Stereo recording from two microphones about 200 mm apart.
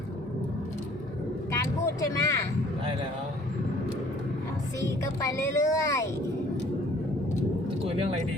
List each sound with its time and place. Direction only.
1.5 s vehicle: 15° left (ahead or behind)
5.0 s speech: 15° left (ahead or behind)